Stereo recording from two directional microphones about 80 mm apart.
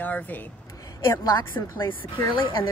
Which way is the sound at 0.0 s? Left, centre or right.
Left.